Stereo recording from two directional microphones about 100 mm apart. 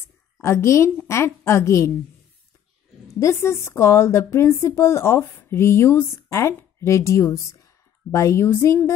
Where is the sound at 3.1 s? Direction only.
30° left (ahead or behind).